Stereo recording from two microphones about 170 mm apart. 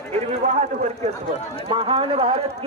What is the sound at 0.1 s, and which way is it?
A man's voice, 40° right (ahead or behind).